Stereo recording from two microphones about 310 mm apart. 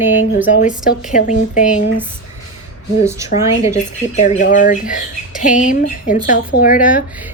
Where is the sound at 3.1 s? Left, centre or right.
Centre.